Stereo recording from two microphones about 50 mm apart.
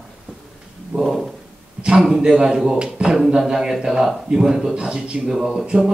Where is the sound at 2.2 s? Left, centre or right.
Centre.